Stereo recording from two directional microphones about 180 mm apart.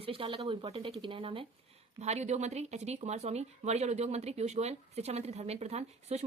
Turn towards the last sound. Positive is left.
turn(degrees=-35)  # may be behind; listen again after turning